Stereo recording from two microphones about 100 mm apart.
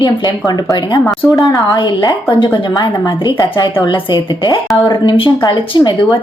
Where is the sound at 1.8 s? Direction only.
45° left (ahead or behind).